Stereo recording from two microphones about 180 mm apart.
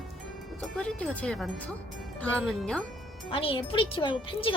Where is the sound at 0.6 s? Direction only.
5° left (ahead or behind).